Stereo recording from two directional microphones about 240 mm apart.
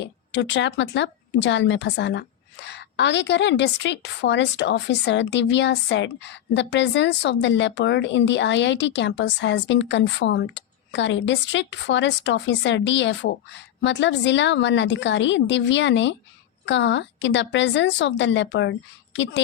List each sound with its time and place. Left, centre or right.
0.0 s a woman's voice: left